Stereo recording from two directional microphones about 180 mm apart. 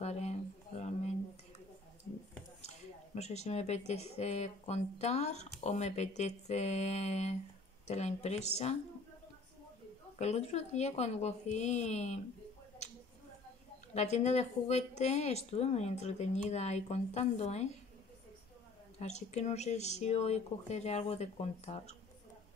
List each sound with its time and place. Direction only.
0.0 s a sound: 35° left (ahead or behind)
3.2 s speech: 35° left (ahead or behind)
10.1 s speech: 35° left (ahead or behind)
13.9 s speech: 40° left (ahead or behind)
18.9 s speech: 40° left (ahead or behind)